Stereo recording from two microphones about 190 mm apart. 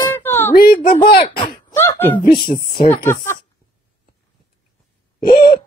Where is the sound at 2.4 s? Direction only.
25° left (ahead or behind).